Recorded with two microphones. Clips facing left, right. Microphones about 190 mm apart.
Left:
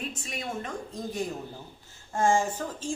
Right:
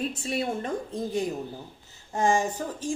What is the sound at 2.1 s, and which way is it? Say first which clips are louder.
Speech: even; 20° right (ahead or behind).